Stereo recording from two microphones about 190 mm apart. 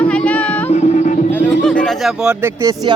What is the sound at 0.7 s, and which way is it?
Music, 35° left (ahead or behind).